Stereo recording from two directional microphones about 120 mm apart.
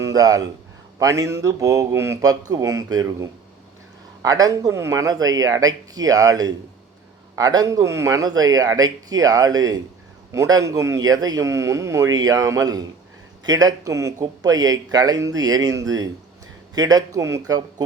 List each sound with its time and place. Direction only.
0.0 s a man's voice: 30° right (ahead or behind)